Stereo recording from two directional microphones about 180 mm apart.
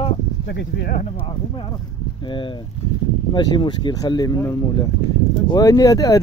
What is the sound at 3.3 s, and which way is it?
Speech, 25° left (ahead or behind).